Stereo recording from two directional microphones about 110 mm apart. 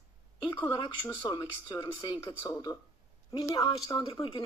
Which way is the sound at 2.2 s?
35° left (ahead or behind).